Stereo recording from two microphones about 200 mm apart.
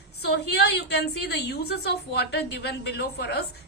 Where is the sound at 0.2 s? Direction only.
55° left (ahead or behind).